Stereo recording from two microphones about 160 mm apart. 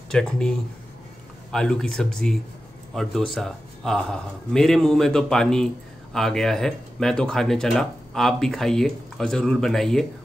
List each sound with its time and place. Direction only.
0.1 s speech: 5° left (ahead or behind)